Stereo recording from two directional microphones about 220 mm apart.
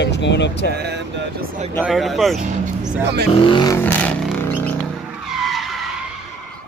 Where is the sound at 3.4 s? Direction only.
20° left (ahead or behind).